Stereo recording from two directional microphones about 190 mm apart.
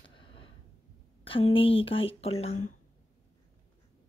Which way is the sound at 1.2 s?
30° left (ahead or behind).